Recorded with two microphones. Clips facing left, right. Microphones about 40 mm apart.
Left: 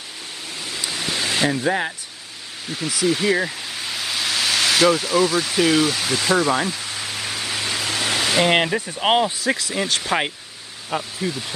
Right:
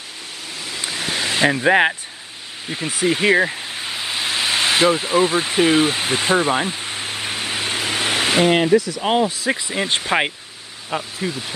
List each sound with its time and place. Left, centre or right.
0.7 s waves: centre
1.4 s speech: right
1.7 s speech: right
2.7 s a sound: right
8.7 s speech: left
9.6 s speech: right